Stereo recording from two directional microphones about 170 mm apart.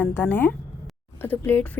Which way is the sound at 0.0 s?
10° left (ahead or behind).